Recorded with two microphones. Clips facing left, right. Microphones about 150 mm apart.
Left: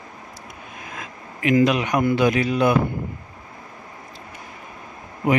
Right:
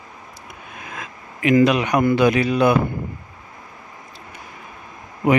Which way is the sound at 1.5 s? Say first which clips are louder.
Right 2 dB; 70° right (ahead or behind).